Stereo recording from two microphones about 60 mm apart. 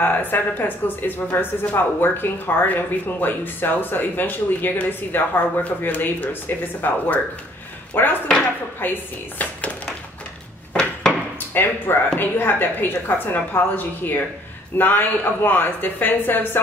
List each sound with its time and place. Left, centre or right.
0.0 s speech: left
9.4 s a sound: left
11.3 s speech: left